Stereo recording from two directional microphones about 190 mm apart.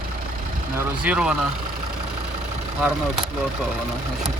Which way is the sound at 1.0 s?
5° right (ahead or behind).